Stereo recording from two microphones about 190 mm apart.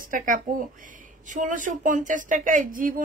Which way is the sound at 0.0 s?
45° right (ahead or behind).